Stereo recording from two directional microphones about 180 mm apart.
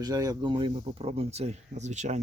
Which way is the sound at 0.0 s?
20° right (ahead or behind).